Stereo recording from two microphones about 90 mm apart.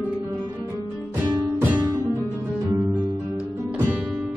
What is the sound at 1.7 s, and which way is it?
Music, 40° right (ahead or behind).